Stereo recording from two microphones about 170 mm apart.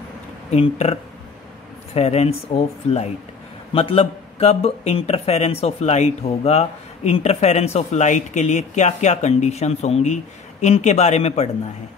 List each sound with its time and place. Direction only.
0.5 s speech: 40° left (ahead or behind)
2.0 s speech: 40° left (ahead or behind)